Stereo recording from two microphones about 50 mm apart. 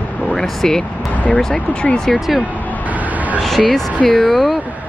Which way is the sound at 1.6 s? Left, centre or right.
Left.